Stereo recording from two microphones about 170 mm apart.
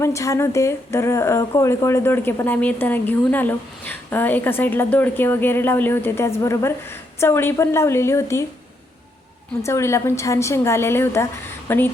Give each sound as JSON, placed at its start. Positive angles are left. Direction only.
{"t": 0.0, "sound": "a woman's voice", "side_deg": 15}
{"t": 9.6, "sound": "a woman's voice", "side_deg": 15}